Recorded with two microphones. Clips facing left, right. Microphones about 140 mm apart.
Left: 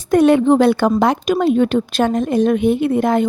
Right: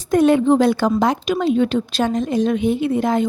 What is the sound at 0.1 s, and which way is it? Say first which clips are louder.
A woman's voice: left 2 dB; 70° left (ahead or behind).